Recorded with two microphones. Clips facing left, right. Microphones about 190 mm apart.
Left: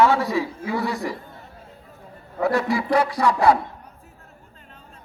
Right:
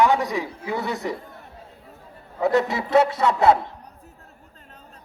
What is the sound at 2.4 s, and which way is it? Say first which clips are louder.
A man's voice: right 1 dB; 20° right (ahead or behind).